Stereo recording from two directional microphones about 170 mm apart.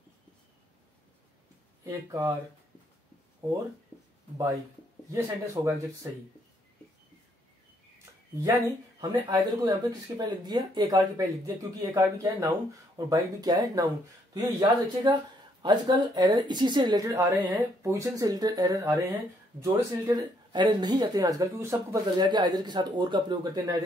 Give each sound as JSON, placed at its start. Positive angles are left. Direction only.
{"t": 1.9, "sound": "speech", "side_deg": -20}
{"t": 3.4, "sound": "speech", "side_deg": -15}
{"t": 5.1, "sound": "speech", "side_deg": -15}
{"t": 8.0, "sound": "a sound", "side_deg": -15}
{"t": 9.3, "sound": "speech", "side_deg": -20}
{"t": 20.2, "sound": "speech", "side_deg": -25}